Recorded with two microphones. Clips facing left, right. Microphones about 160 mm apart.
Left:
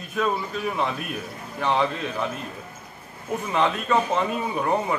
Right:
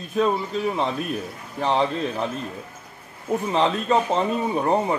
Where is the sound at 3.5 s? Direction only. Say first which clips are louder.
Right 1 dB; 30° right (ahead or behind).